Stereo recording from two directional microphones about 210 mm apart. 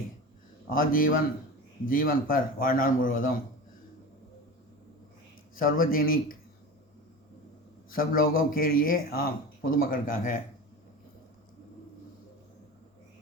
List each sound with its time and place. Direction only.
0.7 s a man's voice: 40° left (ahead or behind)
5.5 s speech: 40° left (ahead or behind)
7.9 s speech: 45° left (ahead or behind)